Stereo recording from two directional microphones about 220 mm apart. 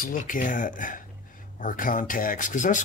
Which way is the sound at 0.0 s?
40° left (ahead or behind).